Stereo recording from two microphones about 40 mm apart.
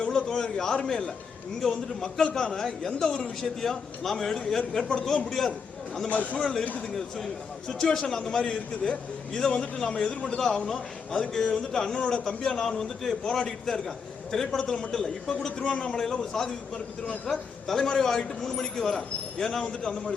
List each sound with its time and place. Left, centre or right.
0.3 s a man's voice: centre
6.1 s a man's voice: left
6.4 s a man's voice: centre